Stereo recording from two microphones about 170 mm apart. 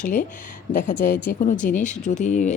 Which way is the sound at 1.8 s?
45° left (ahead or behind).